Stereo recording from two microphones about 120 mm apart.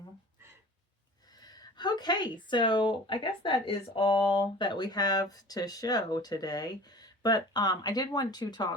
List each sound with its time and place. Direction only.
1.4 s a woman's voice: 35° left (ahead or behind)